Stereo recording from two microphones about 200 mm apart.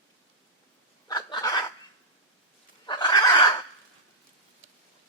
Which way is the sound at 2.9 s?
20° left (ahead or behind).